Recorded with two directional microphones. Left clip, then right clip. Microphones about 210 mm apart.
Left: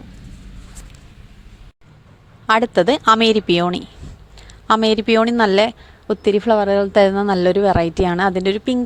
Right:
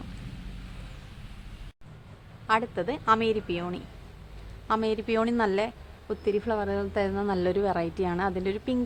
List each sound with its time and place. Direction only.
2.5 s a woman's voice: 40° left (ahead or behind)